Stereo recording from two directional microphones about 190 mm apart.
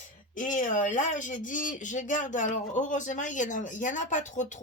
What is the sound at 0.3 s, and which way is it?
Speech, 45° left (ahead or behind).